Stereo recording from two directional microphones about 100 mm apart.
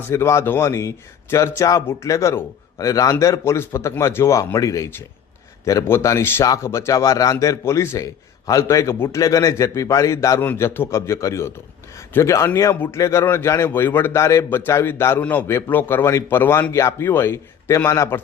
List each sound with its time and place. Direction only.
0.1 s a man's voice: 25° left (ahead or behind)